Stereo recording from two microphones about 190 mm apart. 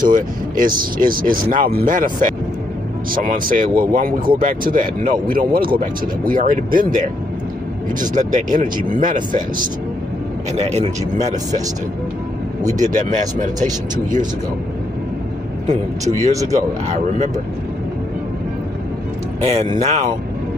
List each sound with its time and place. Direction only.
0.1 s speech: 45° right (ahead or behind)
8.0 s speech: 40° right (ahead or behind)
12.6 s speech: 40° right (ahead or behind)
15.6 s speech: 40° right (ahead or behind)
19.4 s speech: 35° right (ahead or behind)